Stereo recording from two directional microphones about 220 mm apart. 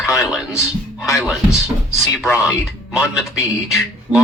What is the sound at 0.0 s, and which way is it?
Music, 15° left (ahead or behind).